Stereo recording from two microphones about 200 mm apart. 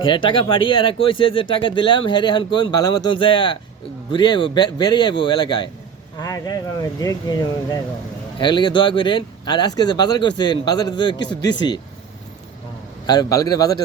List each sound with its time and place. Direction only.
0.0 s speech: 25° left (ahead or behind)
13.1 s speech: 20° left (ahead or behind)